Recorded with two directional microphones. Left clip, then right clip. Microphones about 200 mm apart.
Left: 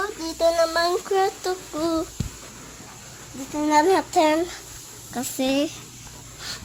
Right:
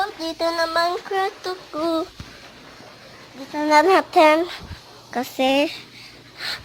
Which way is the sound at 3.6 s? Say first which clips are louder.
Right 4 dB; 30° right (ahead or behind).